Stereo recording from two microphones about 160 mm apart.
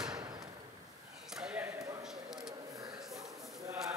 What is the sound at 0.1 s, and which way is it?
Slam, 25° right (ahead or behind).